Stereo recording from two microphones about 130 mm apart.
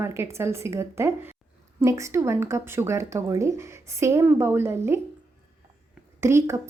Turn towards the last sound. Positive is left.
turn(degrees=-20)  # may be behind; listen again after turning